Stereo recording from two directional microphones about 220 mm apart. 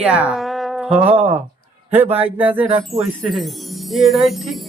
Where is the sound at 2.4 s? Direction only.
10° right (ahead or behind).